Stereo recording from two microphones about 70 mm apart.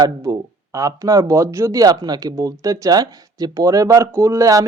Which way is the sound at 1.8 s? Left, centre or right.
Right.